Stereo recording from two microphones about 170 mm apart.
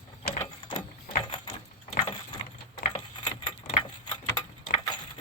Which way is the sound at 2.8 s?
45° left (ahead or behind).